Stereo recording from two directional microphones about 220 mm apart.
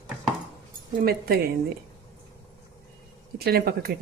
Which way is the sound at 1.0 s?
45° right (ahead or behind).